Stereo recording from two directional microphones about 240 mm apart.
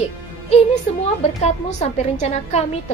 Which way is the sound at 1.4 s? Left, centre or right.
Left.